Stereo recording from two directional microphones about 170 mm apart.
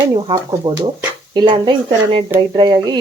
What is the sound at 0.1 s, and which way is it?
Speech, 30° right (ahead or behind).